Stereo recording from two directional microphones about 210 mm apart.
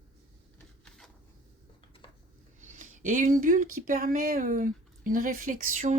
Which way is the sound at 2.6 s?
35° right (ahead or behind).